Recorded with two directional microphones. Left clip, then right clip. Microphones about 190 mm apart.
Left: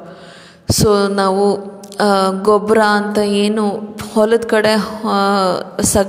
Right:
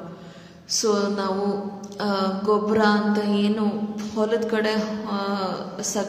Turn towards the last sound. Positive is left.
turn(degrees=50)  # may be behind; listen again after turning